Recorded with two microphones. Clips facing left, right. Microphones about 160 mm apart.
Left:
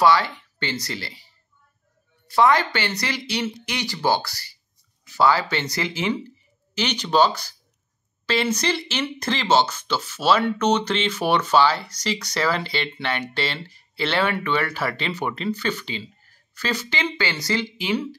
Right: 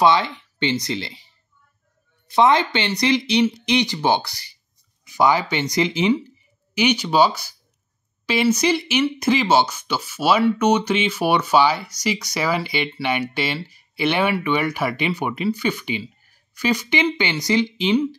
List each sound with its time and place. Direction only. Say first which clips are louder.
0.0 s speech: right 1 dB; 20° right (ahead or behind)